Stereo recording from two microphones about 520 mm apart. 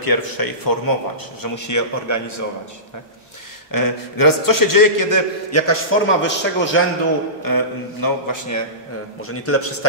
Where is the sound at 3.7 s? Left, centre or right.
Left.